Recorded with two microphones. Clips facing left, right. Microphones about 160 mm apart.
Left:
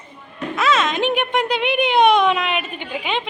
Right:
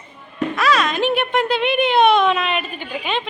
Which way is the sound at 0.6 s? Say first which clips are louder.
Even; 20° left (ahead or behind).